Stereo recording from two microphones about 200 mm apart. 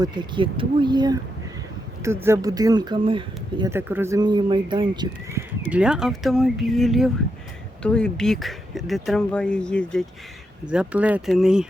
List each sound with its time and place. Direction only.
0.0 s speech: 20° right (ahead or behind)
3.7 s speech: 10° right (ahead or behind)
5.6 s speech: 5° right (ahead or behind)
10.7 s speech: 5° right (ahead or behind)